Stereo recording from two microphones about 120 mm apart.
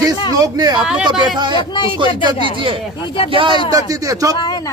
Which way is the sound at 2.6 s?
45° right (ahead or behind).